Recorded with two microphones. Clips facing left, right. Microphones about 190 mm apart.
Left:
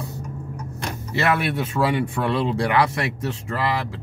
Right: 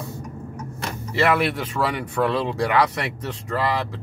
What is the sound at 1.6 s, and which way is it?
Speech, 25° left (ahead or behind).